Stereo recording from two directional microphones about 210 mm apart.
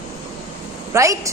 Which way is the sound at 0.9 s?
15° right (ahead or behind).